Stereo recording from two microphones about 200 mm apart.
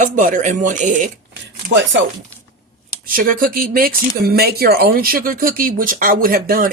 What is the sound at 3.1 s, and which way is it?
Speech, 45° right (ahead or behind).